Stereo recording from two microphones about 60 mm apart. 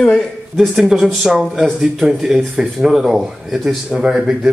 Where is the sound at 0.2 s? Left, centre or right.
Centre.